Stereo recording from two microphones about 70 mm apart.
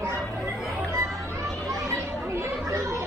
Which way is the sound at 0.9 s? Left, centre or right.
Right.